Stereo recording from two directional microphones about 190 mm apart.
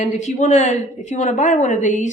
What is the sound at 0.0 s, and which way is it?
Speech, 40° left (ahead or behind).